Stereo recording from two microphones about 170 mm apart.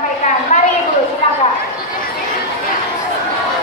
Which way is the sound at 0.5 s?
45° left (ahead or behind).